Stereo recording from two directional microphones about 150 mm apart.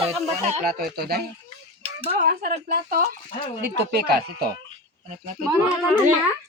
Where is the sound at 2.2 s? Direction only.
80° right.